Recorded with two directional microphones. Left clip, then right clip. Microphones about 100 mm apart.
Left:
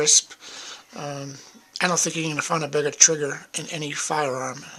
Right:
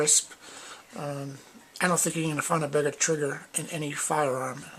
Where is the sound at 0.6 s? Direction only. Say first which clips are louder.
Left 3 dB; 30° left (ahead or behind).